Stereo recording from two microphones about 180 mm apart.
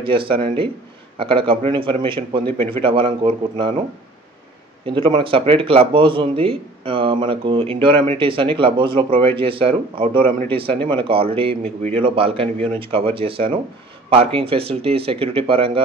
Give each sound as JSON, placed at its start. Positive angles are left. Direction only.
{"t": 0.0, "sound": "speech", "side_deg": -30}
{"t": 4.8, "sound": "speech", "side_deg": -30}